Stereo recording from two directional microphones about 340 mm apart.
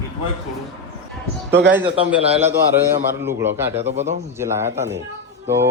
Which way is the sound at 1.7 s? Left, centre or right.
Centre.